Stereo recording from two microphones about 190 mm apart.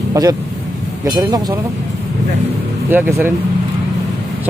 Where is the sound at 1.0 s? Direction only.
20° right (ahead or behind).